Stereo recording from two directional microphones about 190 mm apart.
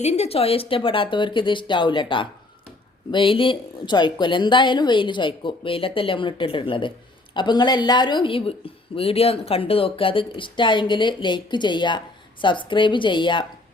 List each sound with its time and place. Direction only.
0.0 s speech: 35° left (ahead or behind)